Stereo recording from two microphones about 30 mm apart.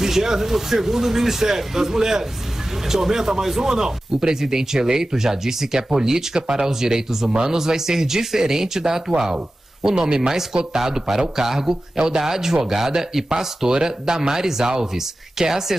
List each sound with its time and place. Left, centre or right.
0.0 s speech: centre
13.7 s speech: right